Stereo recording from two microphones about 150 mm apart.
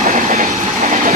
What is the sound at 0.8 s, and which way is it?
Train, 45° right (ahead or behind).